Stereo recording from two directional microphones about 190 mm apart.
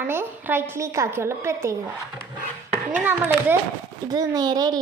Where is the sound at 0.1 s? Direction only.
10° right (ahead or behind).